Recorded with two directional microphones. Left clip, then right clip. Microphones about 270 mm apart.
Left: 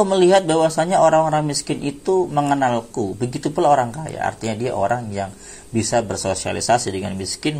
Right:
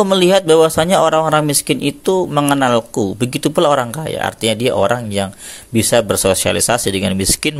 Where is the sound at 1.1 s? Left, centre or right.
Right.